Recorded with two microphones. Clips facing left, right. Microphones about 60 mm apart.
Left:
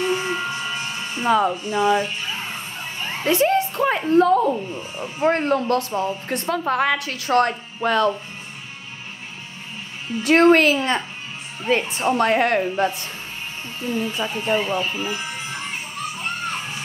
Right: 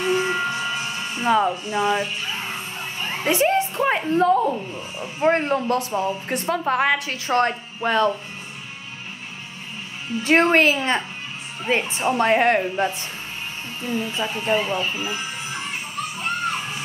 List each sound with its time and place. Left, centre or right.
0.0 s a sound: centre
3.3 s speech: centre
5.3 s a woman's voice: centre
5.9 s a woman's voice: centre; by 8.1 s right
10.2 s a woman's voice: right
11.7 s a woman's voice: centre
12.5 s speech: centre
16.2 s music: centre